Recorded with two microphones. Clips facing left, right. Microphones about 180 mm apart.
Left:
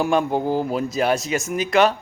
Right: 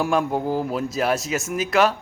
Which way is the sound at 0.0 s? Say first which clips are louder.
Left 2 dB; centre (ahead or behind).